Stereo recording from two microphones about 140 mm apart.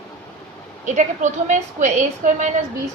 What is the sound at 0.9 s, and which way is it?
A woman's voice, 60° right (ahead or behind).